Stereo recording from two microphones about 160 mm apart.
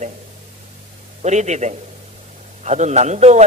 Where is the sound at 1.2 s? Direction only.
45° right (ahead or behind).